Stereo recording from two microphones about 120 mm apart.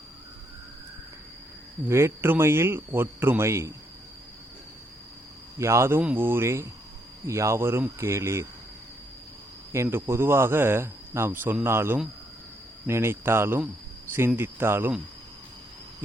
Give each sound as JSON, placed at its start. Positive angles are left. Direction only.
{"t": 1.9, "sound": "speech", "side_deg": -20}
{"t": 5.5, "sound": "speech", "side_deg": -25}
{"t": 9.7, "sound": "speech", "side_deg": -20}